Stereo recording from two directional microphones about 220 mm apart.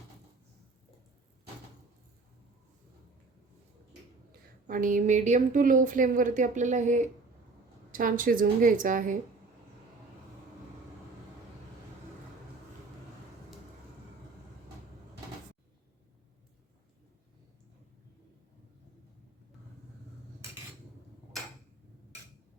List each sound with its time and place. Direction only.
4.6 s a woman's voice: 35° right (ahead or behind)